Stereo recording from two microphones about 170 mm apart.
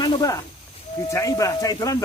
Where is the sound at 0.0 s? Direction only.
20° left (ahead or behind).